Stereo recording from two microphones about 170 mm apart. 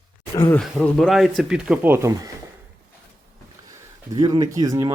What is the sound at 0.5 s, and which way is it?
Speech, 5° left (ahead or behind).